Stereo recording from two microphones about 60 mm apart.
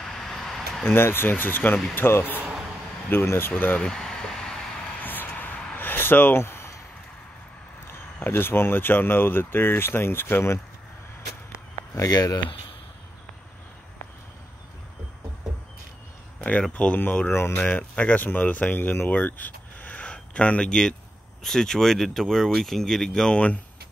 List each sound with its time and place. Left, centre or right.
0.0 s a sound: centre
0.8 s speech: left
3.5 s speech: left
3.8 s a sound: centre
5.0 s a sound: left
7.8 s speech: left
11.9 s speech: left
16.7 s speech: left
17.3 s speech: left
17.6 s speech: left